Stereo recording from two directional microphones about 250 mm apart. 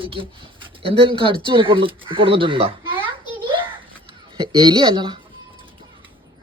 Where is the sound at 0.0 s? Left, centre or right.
Right.